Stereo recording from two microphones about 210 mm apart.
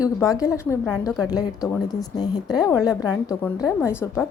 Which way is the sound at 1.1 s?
Centre (ahead or behind).